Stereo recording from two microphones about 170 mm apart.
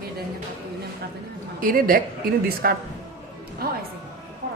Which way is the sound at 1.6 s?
55° right (ahead or behind).